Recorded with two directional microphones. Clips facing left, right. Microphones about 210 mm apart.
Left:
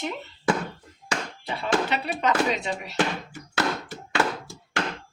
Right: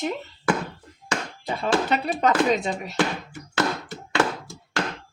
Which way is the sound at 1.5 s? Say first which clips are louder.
Right 3 dB; 45° right (ahead or behind).